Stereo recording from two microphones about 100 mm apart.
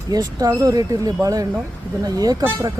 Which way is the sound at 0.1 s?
40° right (ahead or behind).